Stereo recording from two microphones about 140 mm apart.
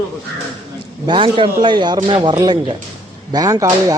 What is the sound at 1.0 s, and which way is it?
A man's voice, 35° right (ahead or behind).